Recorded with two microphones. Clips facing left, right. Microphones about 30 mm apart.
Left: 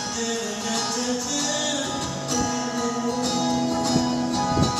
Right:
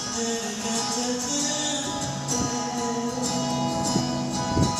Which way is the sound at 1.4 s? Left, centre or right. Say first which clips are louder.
Left 2 dB; centre.